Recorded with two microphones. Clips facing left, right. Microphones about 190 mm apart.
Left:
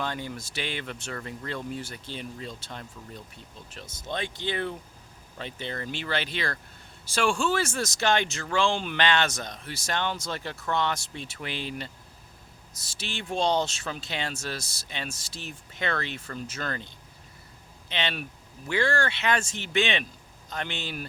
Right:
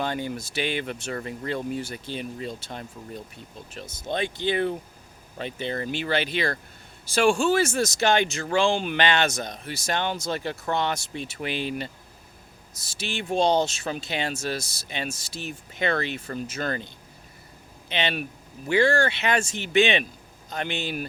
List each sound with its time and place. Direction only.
0.0 s speech: 15° right (ahead or behind)
3.8 s speech: 15° right (ahead or behind)
13.0 s speech: 15° right (ahead or behind)
13.4 s speech: 50° right (ahead or behind)
13.8 s speech: 15° right (ahead or behind)